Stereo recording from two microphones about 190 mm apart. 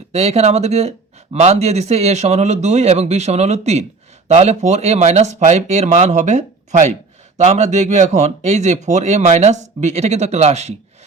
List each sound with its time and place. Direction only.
0.1 s speech: 35° right (ahead or behind)